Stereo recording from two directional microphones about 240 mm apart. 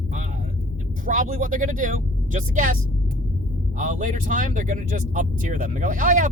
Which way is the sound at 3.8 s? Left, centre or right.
Right.